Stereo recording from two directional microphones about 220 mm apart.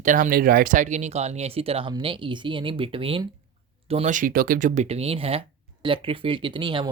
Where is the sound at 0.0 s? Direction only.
35° right (ahead or behind).